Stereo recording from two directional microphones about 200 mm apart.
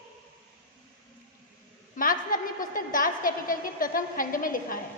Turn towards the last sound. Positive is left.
turn(degrees=45)  # may be behind; listen again after turning